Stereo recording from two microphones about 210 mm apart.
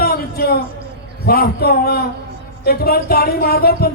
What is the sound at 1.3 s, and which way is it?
Music, 45° left (ahead or behind).